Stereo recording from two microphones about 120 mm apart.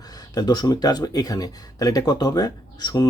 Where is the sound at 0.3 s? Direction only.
35° left (ahead or behind).